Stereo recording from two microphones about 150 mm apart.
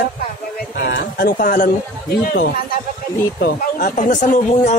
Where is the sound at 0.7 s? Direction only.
80° left.